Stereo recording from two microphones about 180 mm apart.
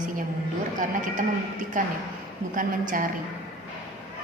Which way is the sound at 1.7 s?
50° right (ahead or behind).